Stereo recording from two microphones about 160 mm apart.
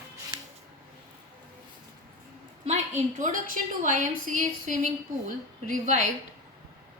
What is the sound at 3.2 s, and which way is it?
A woman's voice, 50° right (ahead or behind).